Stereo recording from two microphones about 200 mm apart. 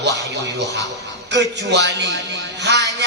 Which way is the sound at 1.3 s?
60° right (ahead or behind).